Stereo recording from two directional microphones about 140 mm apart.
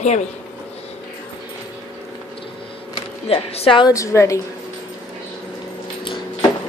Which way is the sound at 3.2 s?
45° left (ahead or behind).